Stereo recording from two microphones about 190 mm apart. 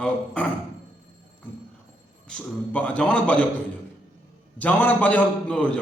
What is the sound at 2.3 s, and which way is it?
A man's voice, 5° left (ahead or behind).